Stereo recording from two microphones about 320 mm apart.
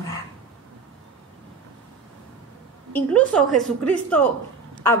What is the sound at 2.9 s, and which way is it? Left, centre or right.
A woman's voice, centre.